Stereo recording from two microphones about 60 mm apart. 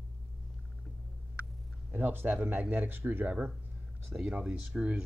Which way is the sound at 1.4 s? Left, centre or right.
Right.